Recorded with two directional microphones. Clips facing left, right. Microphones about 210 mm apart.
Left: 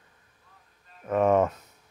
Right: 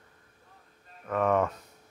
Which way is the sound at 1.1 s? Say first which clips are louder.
Left 4 dB; 20° left (ahead or behind).